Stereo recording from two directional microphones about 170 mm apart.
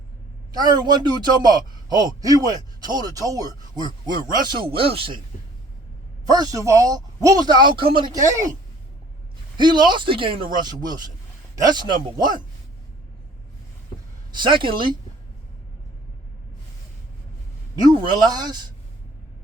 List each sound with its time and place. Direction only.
0.5 s a man's voice: 25° right (ahead or behind)
6.2 s a man's voice: 25° right (ahead or behind)
9.6 s a man's voice: 25° right (ahead or behind)
14.3 s a man's voice: 30° right (ahead or behind)
17.7 s a man's voice: 25° right (ahead or behind)